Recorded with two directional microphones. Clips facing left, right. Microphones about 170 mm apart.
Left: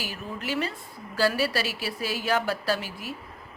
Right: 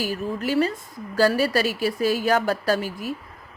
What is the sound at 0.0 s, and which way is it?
A woman's voice, 40° right (ahead or behind).